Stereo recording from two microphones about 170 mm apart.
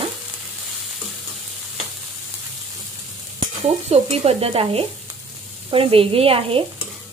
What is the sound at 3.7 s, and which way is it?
Stir, 35° right (ahead or behind).